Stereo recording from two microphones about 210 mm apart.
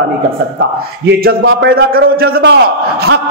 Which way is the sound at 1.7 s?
45° right (ahead or behind).